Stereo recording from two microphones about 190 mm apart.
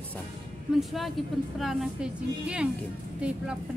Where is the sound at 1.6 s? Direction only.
5° right (ahead or behind).